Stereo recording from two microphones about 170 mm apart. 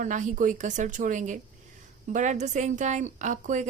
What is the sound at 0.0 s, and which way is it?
A woman's voice, 50° right (ahead or behind).